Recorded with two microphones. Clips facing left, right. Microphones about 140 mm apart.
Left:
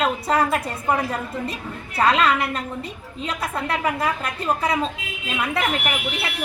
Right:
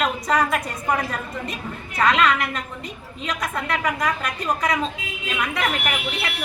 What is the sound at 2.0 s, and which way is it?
A woman's voice, 30° left (ahead or behind).